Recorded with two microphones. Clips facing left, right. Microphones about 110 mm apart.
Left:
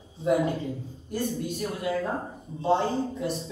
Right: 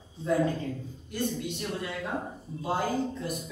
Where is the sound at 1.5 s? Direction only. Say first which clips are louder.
Left 5 dB; 45° left (ahead or behind).